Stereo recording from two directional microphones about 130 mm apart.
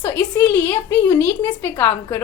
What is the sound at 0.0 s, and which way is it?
A woman's voice, 10° left (ahead or behind).